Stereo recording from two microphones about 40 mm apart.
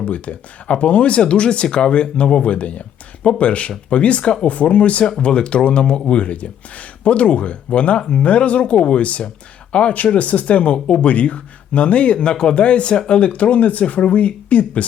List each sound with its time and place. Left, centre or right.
0.0 s speech: left
4.4 s speech: left